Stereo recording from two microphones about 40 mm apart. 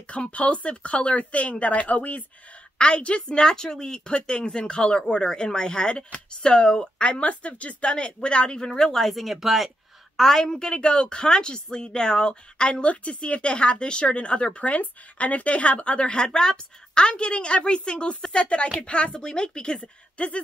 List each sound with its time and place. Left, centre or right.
0.0 s speech: left
2.8 s a woman's voice: left
8.9 s speech: centre
10.1 s a woman's voice: centre; by 20.4 s left